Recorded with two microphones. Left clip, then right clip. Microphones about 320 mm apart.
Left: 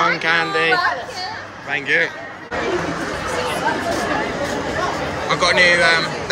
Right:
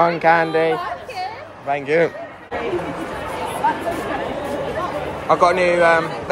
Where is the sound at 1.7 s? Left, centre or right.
Centre.